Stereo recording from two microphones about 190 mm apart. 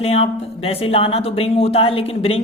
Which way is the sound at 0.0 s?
30° left (ahead or behind).